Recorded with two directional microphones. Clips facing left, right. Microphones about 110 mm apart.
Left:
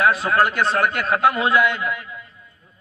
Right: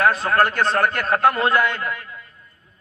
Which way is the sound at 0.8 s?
40° right (ahead or behind).